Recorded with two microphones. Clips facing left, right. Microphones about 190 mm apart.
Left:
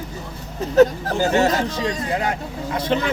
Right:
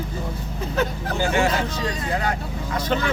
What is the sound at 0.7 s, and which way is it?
Speech, 40° left (ahead or behind).